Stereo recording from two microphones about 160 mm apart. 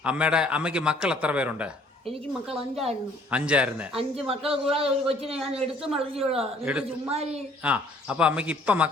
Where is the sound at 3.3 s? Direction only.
5° right (ahead or behind).